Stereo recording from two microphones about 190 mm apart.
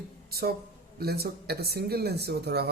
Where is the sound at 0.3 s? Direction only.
55° right (ahead or behind).